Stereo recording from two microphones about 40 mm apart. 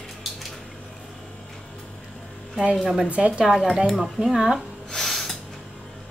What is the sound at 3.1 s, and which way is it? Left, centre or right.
Speech, right.